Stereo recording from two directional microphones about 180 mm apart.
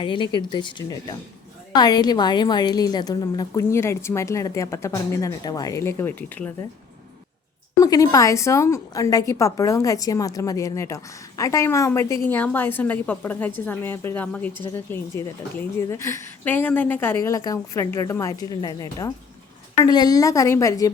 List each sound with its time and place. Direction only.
0.0 s a woman's voice: 25° left (ahead or behind); by 6.7 s 10° left (ahead or behind)
7.8 s a woman's voice: 20° left (ahead or behind)